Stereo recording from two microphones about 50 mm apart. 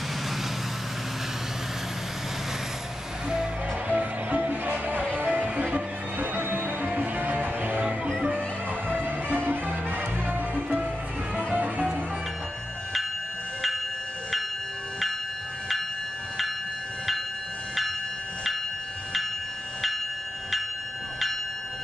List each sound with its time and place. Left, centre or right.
3.9 s music: right
10.2 s music: right